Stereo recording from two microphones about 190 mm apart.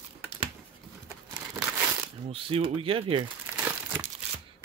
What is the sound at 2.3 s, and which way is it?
Speech, 30° right (ahead or behind).